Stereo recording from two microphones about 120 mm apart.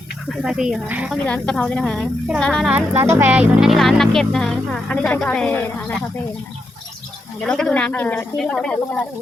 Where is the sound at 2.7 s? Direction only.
15° right (ahead or behind).